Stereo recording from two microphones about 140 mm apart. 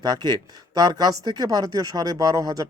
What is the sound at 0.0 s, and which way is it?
Speech, 30° right (ahead or behind).